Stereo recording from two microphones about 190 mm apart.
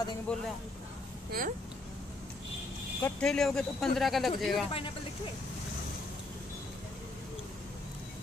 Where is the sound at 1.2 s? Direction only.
50° right (ahead or behind).